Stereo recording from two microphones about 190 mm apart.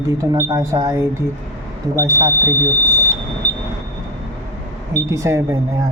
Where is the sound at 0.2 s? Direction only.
15° right (ahead or behind).